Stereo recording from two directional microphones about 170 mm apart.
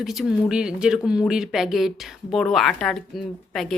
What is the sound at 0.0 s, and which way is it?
A woman's voice, centre (ahead or behind).